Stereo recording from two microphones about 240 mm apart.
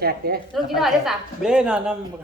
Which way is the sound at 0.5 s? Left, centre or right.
Centre.